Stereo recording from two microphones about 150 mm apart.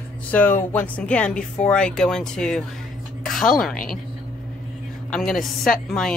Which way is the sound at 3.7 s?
70° left (ahead or behind).